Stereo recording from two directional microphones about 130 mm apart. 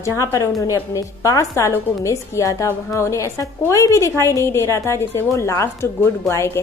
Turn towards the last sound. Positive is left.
turn(degrees=20)  # may be behind; listen again after turning